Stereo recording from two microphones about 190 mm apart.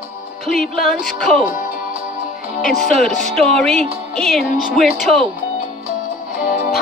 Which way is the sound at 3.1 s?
35° right (ahead or behind).